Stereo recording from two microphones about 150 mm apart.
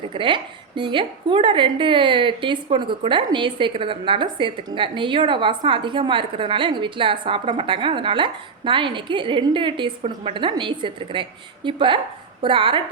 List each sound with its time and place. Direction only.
0.1 s a woman's voice: 35° right (ahead or behind)